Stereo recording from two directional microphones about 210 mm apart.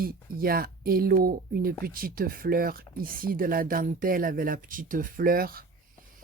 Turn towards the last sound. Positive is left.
turn(degrees=-45)  # may be behind; listen again after turning